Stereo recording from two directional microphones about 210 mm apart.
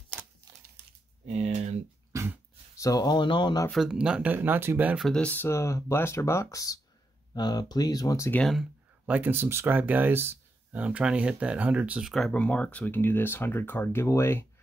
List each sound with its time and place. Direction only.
1.2 s a sound: 30° right (ahead or behind)
2.1 s dog: 15° right (ahead or behind)
2.8 s speech: 15° left (ahead or behind)
3.6 s speech: centre (ahead or behind)